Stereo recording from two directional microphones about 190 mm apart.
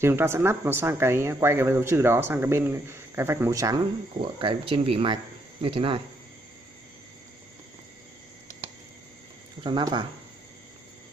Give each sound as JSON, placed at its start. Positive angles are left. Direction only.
{"t": 0.0, "sound": "speech", "side_deg": -15}
{"t": 9.6, "sound": "speech", "side_deg": -25}